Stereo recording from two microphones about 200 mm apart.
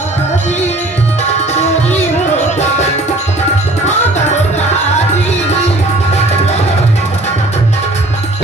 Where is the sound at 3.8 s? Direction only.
35° left (ahead or behind).